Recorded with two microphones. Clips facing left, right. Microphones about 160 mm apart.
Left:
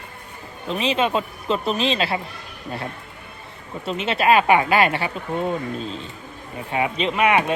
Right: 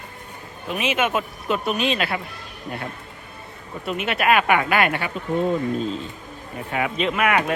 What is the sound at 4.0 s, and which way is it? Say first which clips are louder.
Speech: left 2 dB; 25° left (ahead or behind).